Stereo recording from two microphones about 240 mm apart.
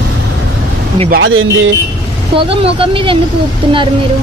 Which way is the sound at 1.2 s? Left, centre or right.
Right.